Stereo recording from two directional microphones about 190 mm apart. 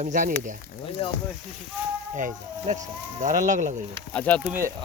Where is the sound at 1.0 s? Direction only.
30° left (ahead or behind).